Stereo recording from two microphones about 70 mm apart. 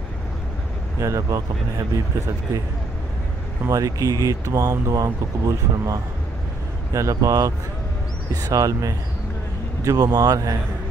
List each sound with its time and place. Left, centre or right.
1.0 s speech: right
3.6 s speech: right